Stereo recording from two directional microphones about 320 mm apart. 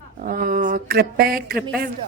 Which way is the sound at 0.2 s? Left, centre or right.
Right.